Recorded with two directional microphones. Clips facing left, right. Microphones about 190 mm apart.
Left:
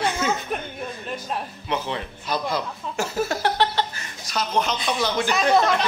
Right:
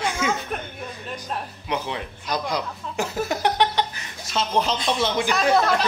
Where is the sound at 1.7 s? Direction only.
10° right (ahead or behind).